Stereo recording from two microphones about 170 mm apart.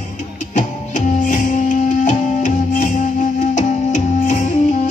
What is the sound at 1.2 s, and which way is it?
Music, 45° left (ahead or behind).